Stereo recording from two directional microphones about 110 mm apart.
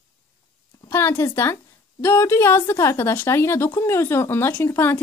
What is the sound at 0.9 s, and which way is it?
A woman's voice, 20° left (ahead or behind).